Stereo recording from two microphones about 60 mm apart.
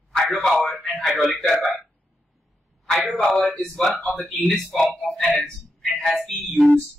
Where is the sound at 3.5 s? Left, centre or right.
Centre.